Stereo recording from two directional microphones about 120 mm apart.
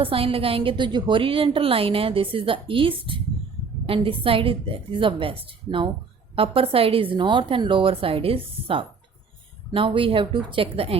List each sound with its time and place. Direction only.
0.0 s a woman's voice: 50° right (ahead or behind)